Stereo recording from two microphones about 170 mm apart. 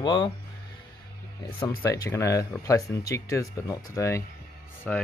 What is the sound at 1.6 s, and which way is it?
Speech, 20° left (ahead or behind).